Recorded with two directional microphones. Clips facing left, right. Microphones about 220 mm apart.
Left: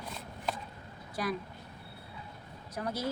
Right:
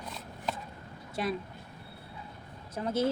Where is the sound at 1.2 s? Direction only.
25° right (ahead or behind).